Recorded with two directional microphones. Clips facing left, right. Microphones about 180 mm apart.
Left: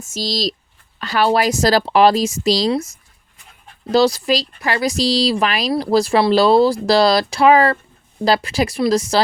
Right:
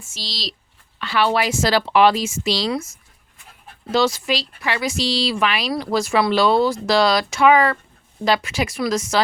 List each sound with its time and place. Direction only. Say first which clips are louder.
0.0 s a woman's voice: left 11 dB; 40° left (ahead or behind)
3.9 s a woman's voice: left 5 dB; 35° left (ahead or behind)